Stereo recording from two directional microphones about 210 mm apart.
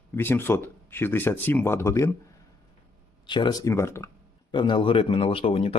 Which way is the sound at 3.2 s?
20° left (ahead or behind).